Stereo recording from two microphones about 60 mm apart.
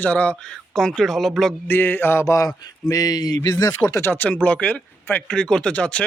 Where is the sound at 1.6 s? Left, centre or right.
Left.